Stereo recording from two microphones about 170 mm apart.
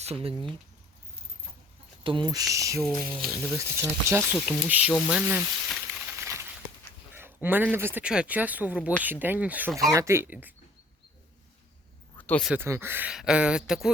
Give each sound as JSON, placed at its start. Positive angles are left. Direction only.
{"t": 0.0, "sound": "speech", "side_deg": -35}
{"t": 2.0, "sound": "speech", "side_deg": -25}
{"t": 2.8, "sound": "speech", "side_deg": 0}
{"t": 3.5, "sound": "speech", "side_deg": -15}
{"t": 5.7, "sound": "a sound", "side_deg": -5}
{"t": 7.4, "sound": "speech", "side_deg": -10}
{"t": 12.1, "sound": "a sound", "side_deg": 10}
{"t": 12.5, "sound": "speech", "side_deg": -15}